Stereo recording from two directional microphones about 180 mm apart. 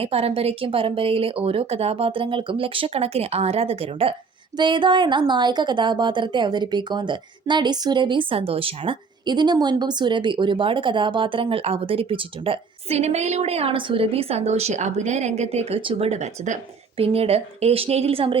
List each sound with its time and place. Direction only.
0.0 s a woman's voice: 35° right (ahead or behind)